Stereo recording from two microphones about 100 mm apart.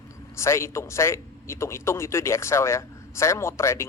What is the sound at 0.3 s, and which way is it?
A man's voice, 30° left (ahead or behind).